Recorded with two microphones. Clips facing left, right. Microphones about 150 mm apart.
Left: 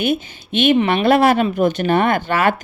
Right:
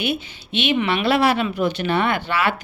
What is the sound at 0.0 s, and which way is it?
Speech, 45° left (ahead or behind).